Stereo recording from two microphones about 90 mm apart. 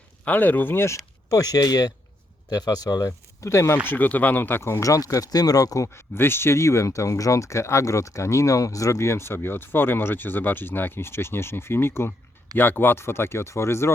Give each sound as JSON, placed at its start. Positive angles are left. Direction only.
{"t": 0.3, "sound": "speech", "side_deg": 20}
{"t": 3.8, "sound": "speech", "side_deg": 20}
{"t": 4.8, "sound": "speech", "side_deg": 40}